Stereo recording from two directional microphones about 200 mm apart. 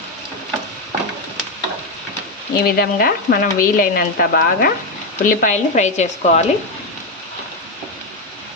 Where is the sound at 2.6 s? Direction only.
50° left (ahead or behind).